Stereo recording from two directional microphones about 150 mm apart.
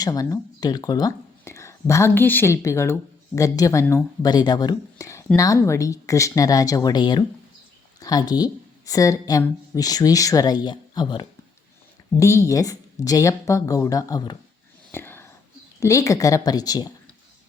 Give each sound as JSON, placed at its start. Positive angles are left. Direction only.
{"t": 0.0, "sound": "speech", "side_deg": 25}
{"t": 14.9, "sound": "whispering", "side_deg": 15}
{"t": 15.8, "sound": "speech", "side_deg": 20}